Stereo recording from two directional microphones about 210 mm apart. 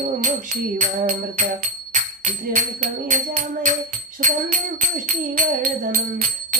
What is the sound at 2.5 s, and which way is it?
Music, 40° right (ahead or behind).